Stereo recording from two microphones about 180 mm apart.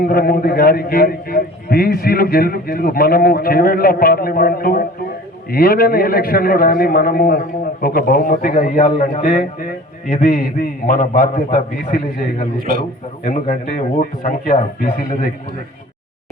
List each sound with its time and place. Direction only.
0.0 s a man's voice: 55° left (ahead or behind)
12.5 s a man's voice: 55° right (ahead or behind)
13.2 s a man's voice: 50° left (ahead or behind)